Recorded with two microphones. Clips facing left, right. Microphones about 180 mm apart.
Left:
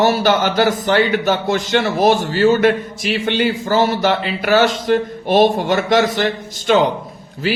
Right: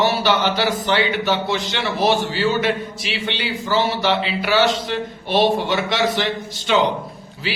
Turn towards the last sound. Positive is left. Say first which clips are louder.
# left 7 dB
turn(degrees=45)  # may be behind; listen again after turning